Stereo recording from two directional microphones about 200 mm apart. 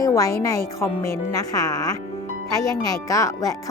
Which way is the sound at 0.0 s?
15° left (ahead or behind).